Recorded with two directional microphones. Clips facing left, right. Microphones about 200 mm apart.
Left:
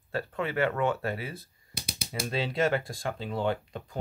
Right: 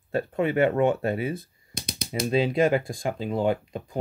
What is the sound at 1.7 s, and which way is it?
Typewriter, 5° left (ahead or behind).